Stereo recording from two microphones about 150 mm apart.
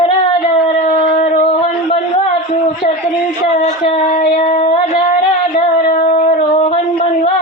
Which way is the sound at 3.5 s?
50° left (ahead or behind).